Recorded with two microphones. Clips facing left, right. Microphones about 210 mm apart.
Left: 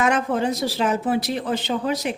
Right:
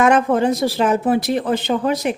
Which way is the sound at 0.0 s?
55° right (ahead or behind).